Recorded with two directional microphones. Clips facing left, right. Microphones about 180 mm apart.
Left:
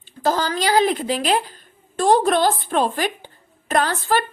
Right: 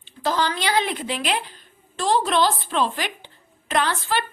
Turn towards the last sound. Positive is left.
turn(degrees=45)  # may be behind; listen again after turning